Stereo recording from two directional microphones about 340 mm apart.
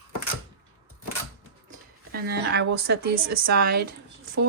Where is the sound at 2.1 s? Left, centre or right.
Right.